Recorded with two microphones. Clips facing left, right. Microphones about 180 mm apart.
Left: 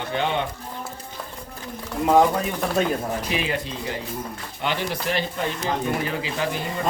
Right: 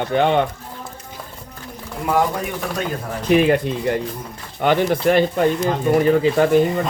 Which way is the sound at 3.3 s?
50° right (ahead or behind).